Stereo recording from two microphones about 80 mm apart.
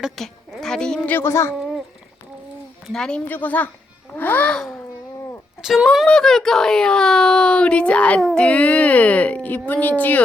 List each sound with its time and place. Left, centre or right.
0.0 s a sound: centre
0.6 s a woman's voice: centre
1.2 s speech: left
2.8 s speech: centre
3.2 s speech: left
5.6 s speech: centre